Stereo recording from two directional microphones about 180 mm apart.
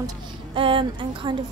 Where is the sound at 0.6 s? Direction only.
30° right (ahead or behind).